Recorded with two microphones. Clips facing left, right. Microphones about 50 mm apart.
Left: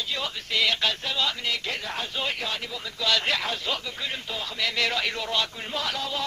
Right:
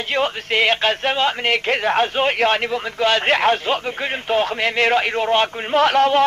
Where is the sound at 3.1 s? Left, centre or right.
Right.